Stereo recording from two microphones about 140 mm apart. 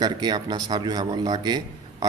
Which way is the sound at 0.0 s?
30° right (ahead or behind).